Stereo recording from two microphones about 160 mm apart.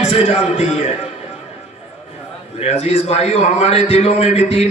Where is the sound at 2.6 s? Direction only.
40° left (ahead or behind).